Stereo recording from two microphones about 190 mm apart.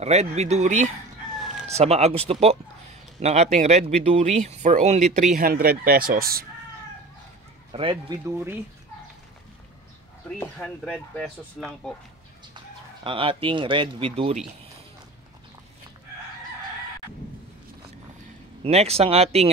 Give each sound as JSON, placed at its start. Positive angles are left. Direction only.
{"t": 0.0, "sound": "a man's voice", "side_deg": -35}
{"t": 7.7, "sound": "speech", "side_deg": -25}
{"t": 10.9, "sound": "speech", "side_deg": 0}
{"t": 12.5, "sound": "speech", "side_deg": -30}
{"t": 18.6, "sound": "speech", "side_deg": -35}